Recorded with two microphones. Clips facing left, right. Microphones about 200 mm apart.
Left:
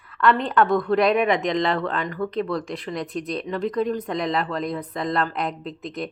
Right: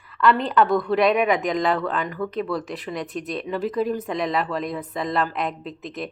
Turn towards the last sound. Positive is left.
turn(degrees=0)  # may be behind; listen again after turning